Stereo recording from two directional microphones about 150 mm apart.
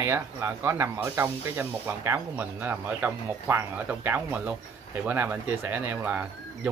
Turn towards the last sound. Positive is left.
turn(degrees=-10)  # may be behind; listen again after turning